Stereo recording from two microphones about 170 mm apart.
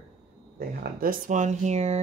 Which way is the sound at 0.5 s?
60° right (ahead or behind).